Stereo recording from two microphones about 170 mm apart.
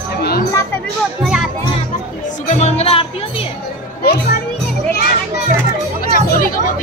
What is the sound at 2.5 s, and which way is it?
Speech, 40° left (ahead or behind).